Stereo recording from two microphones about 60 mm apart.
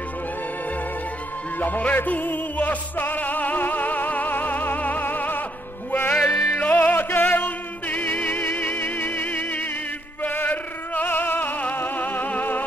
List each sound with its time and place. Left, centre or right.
1.6 s music: left
6.3 s music: left
6.7 s music: left